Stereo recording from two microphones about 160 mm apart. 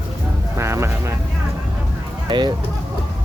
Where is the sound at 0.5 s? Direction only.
15° right (ahead or behind).